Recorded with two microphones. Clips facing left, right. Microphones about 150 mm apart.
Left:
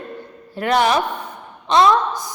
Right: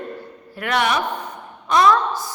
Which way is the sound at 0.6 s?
30° left (ahead or behind).